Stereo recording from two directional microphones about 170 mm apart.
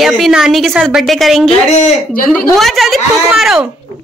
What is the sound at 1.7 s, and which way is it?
Speech, 50° left (ahead or behind).